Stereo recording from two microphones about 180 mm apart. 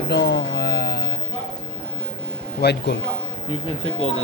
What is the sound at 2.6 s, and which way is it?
Speech, 65° left (ahead or behind).